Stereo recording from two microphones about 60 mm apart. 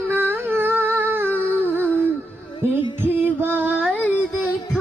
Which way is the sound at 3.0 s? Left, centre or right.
Right.